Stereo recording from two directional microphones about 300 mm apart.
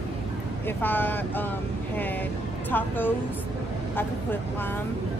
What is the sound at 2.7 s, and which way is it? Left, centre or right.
Speech, centre.